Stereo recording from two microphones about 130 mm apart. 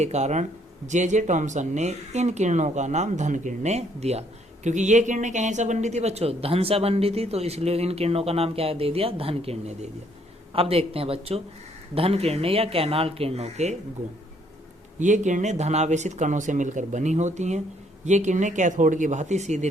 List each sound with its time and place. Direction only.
0.0 s speech: 60° right (ahead or behind)
4.6 s speech: 65° right (ahead or behind)
14.9 s speech: 70° right (ahead or behind)